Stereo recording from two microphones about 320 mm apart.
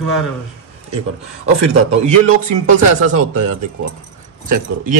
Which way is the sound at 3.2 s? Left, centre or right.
Right.